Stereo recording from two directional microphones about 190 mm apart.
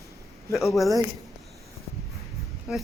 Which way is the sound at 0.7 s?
Centre (ahead or behind).